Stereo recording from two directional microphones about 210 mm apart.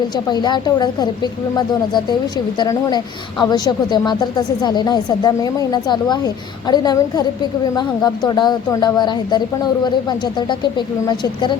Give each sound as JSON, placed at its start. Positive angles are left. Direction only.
{"t": 0.3, "sound": "a woman's voice", "side_deg": 20}